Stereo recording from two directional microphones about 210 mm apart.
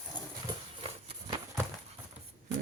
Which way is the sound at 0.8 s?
25° right (ahead or behind).